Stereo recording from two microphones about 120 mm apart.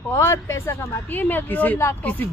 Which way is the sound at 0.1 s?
20° left (ahead or behind).